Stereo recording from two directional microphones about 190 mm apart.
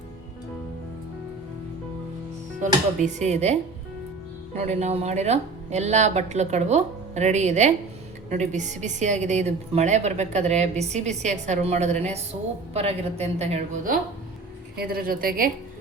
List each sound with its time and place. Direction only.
3.2 s a woman's voice: 35° right (ahead or behind)
14.8 s a woman's voice: 50° right (ahead or behind)